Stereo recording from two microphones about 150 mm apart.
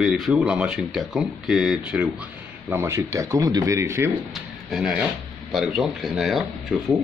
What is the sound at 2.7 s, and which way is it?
Speech, 20° right (ahead or behind).